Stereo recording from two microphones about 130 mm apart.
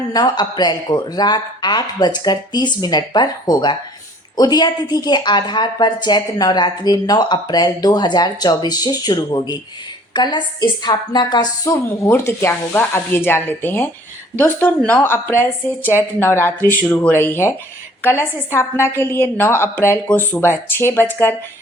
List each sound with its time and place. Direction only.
0.1 s a woman's voice: 30° left (ahead or behind)